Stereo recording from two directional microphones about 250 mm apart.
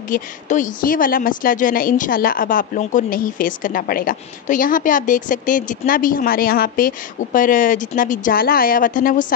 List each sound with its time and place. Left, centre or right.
0.1 s a woman's voice: left